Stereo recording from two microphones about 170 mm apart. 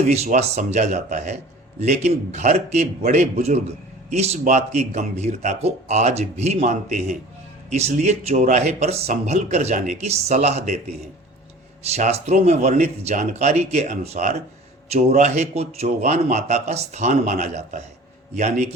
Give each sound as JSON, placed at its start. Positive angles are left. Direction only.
{"t": 0.0, "sound": "speech", "side_deg": -40}
{"t": 11.9, "sound": "speech", "side_deg": -40}